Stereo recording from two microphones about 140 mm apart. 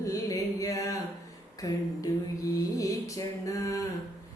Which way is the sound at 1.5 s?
25° left (ahead or behind).